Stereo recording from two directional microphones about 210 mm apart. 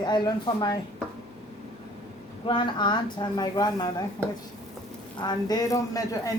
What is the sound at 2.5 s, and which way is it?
Speech, 20° left (ahead or behind).